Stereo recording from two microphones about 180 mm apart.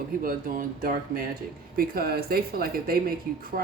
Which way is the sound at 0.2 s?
50° right (ahead or behind).